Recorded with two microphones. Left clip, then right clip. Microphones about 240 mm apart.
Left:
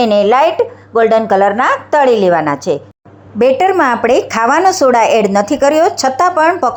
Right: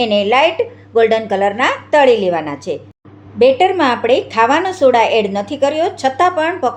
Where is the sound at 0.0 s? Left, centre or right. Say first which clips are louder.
Left 3 dB; centre.